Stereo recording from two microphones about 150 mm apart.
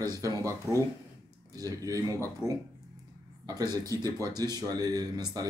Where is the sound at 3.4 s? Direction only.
25° right (ahead or behind).